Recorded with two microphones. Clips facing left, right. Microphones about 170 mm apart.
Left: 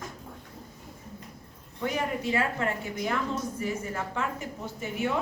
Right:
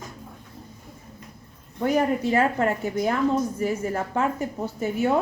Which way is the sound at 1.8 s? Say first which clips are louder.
Right 8 dB; 45° right (ahead or behind).